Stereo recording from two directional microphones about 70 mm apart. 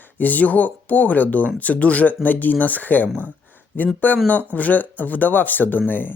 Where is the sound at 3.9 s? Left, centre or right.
Left.